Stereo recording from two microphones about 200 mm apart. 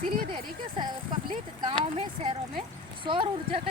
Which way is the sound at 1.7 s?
25° right (ahead or behind).